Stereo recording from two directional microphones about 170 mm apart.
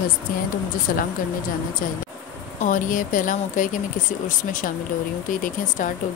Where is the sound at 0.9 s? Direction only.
60° left (ahead or behind).